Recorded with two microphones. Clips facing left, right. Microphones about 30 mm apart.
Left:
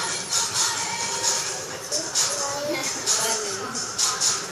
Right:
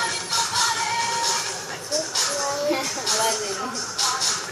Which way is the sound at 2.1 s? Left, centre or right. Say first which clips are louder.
Right 1 dB; right.